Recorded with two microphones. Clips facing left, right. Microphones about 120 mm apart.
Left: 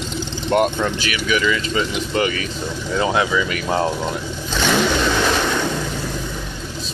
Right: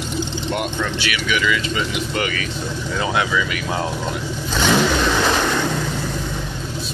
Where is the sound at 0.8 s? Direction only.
30° left (ahead or behind).